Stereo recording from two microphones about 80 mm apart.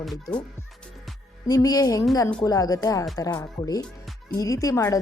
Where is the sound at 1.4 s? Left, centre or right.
Left.